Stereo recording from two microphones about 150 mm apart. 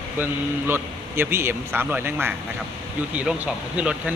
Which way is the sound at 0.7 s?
15° right (ahead or behind).